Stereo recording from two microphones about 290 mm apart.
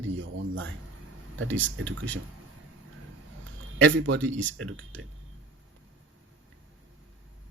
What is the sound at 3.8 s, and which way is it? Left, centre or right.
Speech, right.